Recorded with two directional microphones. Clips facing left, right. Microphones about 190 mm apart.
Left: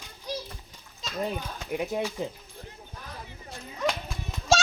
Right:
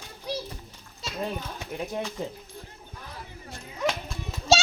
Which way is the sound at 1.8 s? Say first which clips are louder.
Left 2 dB; 10° left (ahead or behind).